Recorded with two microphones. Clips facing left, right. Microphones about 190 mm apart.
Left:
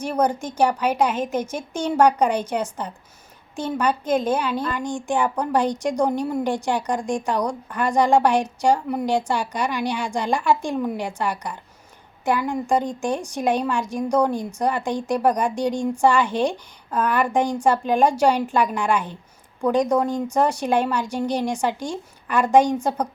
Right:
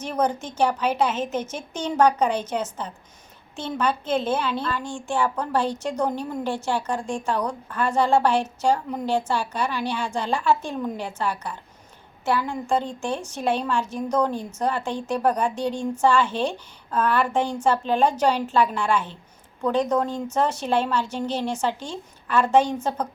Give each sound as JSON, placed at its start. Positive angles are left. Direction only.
{"t": 0.0, "sound": "a child's voice", "side_deg": 10}